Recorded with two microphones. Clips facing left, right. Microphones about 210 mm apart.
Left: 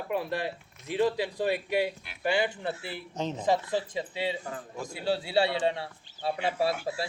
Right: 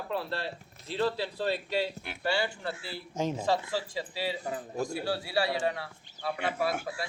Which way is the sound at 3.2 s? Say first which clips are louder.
Right 2 dB; 10° right (ahead or behind).